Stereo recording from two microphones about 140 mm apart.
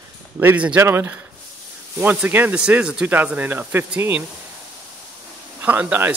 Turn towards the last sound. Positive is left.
turn(degrees=-15)  # may be behind; listen again after turning